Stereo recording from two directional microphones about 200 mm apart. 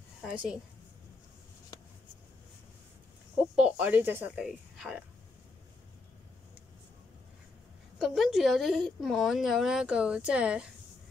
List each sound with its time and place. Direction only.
0.2 s a woman's voice: 5° right (ahead or behind)
1.7 s a sound: 20° left (ahead or behind)
3.5 s a woman's voice: 5° right (ahead or behind)
8.0 s a woman's voice: centre (ahead or behind)